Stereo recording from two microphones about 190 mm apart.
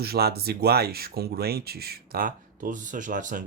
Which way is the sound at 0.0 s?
55° right (ahead or behind).